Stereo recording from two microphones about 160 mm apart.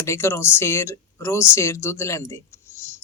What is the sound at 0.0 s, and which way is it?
Speech, 15° left (ahead or behind).